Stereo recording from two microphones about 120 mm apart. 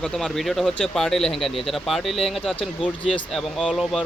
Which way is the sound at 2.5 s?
45° left (ahead or behind).